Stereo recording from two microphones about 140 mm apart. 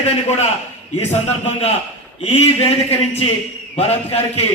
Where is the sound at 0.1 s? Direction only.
50° left (ahead or behind).